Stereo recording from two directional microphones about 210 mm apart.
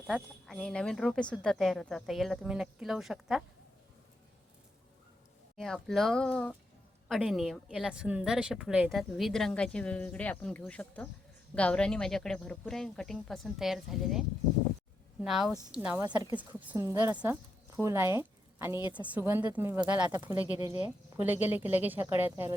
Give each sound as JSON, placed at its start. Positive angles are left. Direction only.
{"t": 0.1, "sound": "a woman's voice", "side_deg": 0}
{"t": 5.5, "sound": "a woman's voice", "side_deg": 0}